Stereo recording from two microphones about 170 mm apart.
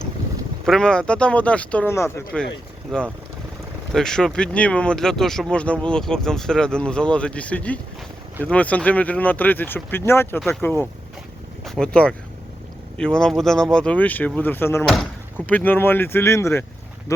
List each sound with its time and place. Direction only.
0.6 s speech: 5° left (ahead or behind)